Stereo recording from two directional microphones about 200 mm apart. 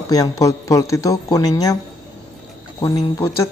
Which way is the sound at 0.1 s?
15° left (ahead or behind).